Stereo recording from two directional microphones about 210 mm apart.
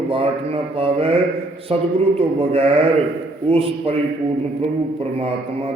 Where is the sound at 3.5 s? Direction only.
25° right (ahead or behind).